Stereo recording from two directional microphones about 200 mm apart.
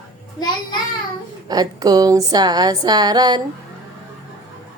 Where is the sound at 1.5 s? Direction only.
20° right (ahead or behind).